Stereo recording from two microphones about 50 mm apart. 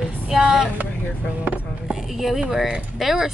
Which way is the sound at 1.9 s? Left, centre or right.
Centre.